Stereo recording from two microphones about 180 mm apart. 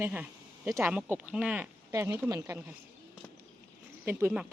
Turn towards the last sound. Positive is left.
turn(degrees=-10)  # may be behind; listen again after turning